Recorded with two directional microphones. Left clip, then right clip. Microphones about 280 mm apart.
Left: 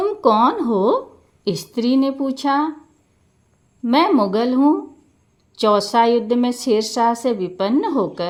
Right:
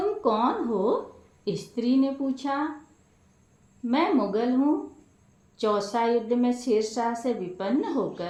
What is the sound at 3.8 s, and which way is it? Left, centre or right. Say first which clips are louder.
A woman's voice: left 9 dB; left.